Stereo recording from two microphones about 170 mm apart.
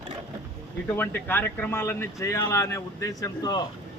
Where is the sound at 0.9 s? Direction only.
10° left (ahead or behind).